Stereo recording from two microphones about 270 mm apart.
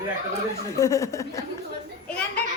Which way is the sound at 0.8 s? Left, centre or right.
Centre.